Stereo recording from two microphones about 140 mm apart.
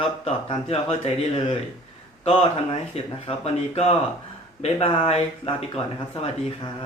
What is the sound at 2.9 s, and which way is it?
Speech, 45° left (ahead or behind).